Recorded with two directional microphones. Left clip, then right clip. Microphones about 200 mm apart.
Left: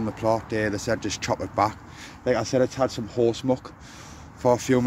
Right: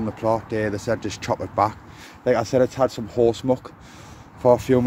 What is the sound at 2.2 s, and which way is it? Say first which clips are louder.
Speech: right 4 dB; 15° right (ahead or behind).